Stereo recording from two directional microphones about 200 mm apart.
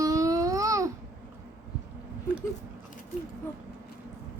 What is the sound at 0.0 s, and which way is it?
Babbling, 15° right (ahead or behind).